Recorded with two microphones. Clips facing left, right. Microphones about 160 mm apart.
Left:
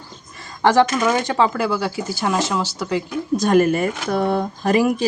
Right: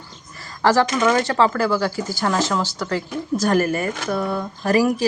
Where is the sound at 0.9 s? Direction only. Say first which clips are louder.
Right 1 dB; 10° left (ahead or behind).